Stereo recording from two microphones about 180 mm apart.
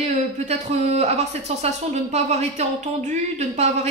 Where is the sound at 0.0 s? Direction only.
35° right (ahead or behind).